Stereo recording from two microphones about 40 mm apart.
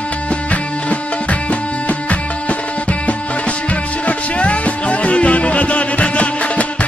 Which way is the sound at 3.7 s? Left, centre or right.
Left.